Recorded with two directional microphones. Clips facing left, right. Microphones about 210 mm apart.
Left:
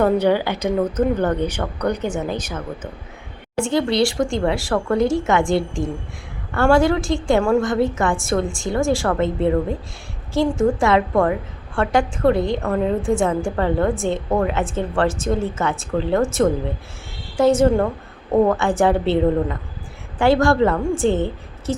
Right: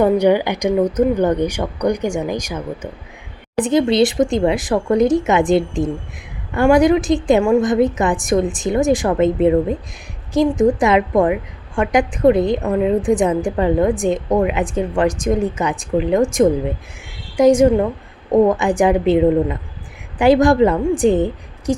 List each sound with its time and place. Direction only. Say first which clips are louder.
0.0 s a woman's voice: right 3 dB; 15° right (ahead or behind)